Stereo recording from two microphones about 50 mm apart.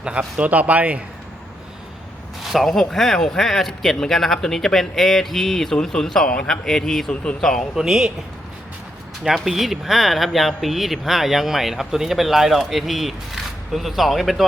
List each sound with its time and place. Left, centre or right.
0.0 s speech: right
2.4 s speech: centre
7.8 s speech: centre
9.3 s speech: centre